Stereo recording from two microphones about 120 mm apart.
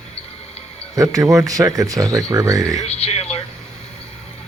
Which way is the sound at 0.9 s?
30° right (ahead or behind).